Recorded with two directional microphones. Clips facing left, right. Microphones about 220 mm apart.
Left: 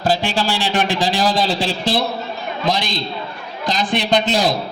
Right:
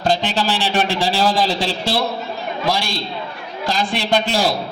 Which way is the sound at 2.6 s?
20° left (ahead or behind).